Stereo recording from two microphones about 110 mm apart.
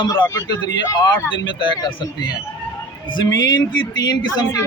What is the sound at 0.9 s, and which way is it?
Speech, 45° left (ahead or behind).